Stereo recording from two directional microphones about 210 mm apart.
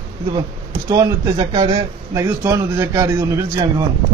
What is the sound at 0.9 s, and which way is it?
A man's voice, 20° right (ahead or behind).